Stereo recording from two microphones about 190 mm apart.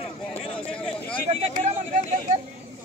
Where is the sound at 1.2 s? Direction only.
35° right (ahead or behind).